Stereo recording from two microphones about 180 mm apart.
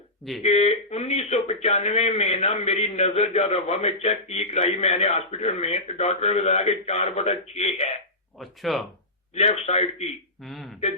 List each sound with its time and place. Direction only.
0.4 s a man's voice: 40° left (ahead or behind)
8.4 s speech: centre (ahead or behind)
9.3 s a man's voice: 35° left (ahead or behind)
10.4 s speech: centre (ahead or behind)